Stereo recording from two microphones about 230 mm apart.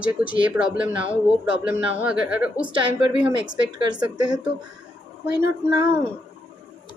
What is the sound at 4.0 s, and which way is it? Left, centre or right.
Speech, centre.